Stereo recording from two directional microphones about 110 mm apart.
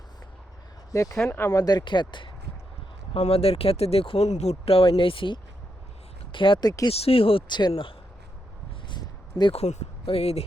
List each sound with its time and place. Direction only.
0.9 s speech: 30° left (ahead or behind); by 2.3 s 45° left (ahead or behind)
3.2 s speech: 65° left (ahead or behind)
4.9 s speech: 50° left (ahead or behind)
6.9 s speech: 65° left (ahead or behind)
8.9 s a sound: 40° left (ahead or behind)
9.5 s speech: 80° left